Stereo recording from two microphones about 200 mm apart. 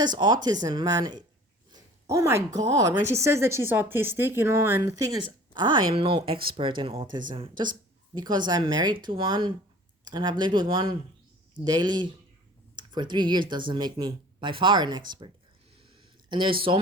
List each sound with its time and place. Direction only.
0.0 s speech: 20° right (ahead or behind)
16.3 s speech: 25° right (ahead or behind)